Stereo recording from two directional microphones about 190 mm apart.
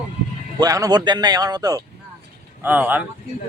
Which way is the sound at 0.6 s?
20° right (ahead or behind).